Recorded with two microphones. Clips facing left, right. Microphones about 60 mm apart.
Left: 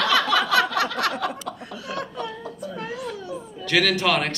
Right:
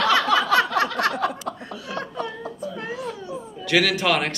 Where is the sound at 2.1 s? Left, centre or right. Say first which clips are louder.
Right 2 dB; right.